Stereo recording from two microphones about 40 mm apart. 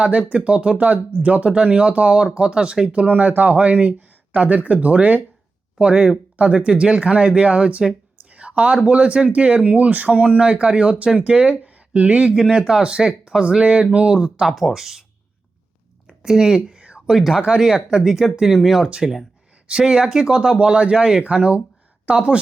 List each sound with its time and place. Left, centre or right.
0.0 s speech: right
0.8 s speech: right
3.1 s speech: right
5.8 s speech: right
12.3 s speech: centre
14.2 s speech: centre
14.5 s speech: centre
16.0 s a sound: centre
17.1 s speech: centre
19.6 s speech: right